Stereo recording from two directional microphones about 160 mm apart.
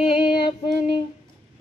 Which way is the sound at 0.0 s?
30° left (ahead or behind).